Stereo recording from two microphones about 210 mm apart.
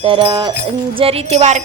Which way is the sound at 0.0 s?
25° right (ahead or behind).